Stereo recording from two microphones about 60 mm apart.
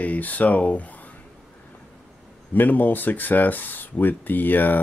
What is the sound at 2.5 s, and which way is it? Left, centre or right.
Speech, left.